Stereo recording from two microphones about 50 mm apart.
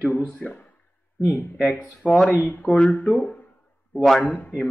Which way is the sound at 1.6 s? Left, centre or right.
Left.